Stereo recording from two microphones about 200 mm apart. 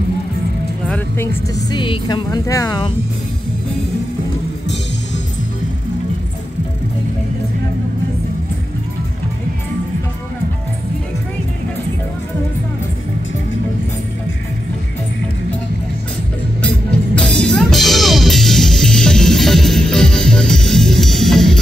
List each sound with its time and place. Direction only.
0.8 s speech: 10° left (ahead or behind)
16.6 s music: 5° left (ahead or behind)